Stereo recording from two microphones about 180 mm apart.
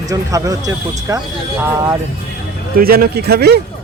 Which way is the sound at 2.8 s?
55° right (ahead or behind).